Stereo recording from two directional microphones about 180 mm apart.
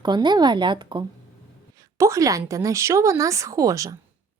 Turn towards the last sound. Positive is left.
turn(degrees=-20)  # may be behind; listen again after turning